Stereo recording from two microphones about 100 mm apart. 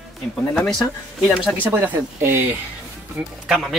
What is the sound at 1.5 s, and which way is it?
Speech, 20° right (ahead or behind).